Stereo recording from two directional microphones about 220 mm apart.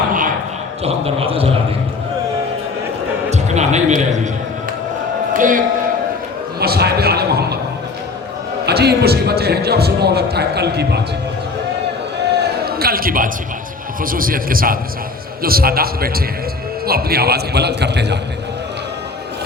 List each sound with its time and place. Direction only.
0.9 s speech: 25° right (ahead or behind)
3.2 s music: 30° right (ahead or behind)
5.3 s a man's voice: 40° right (ahead or behind)
6.6 s a sound: 45° right (ahead or behind)
8.6 s a man's voice: 50° right (ahead or behind)
12.4 s a sound: 45° right (ahead or behind)
14.0 s a man's voice: 40° right (ahead or behind)